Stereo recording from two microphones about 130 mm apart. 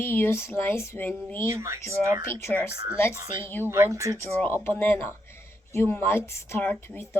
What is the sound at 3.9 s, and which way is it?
Speech, 25° right (ahead or behind).